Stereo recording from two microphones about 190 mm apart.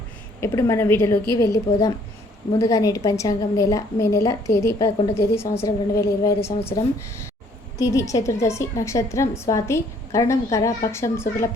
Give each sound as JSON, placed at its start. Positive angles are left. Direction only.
{"t": 0.3, "sound": "a woman's voice", "side_deg": 15}
{"t": 7.8, "sound": "a woman's voice", "side_deg": 15}